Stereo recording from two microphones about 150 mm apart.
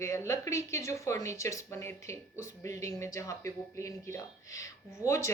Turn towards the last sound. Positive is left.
turn(degrees=20)  # may be behind; listen again after turning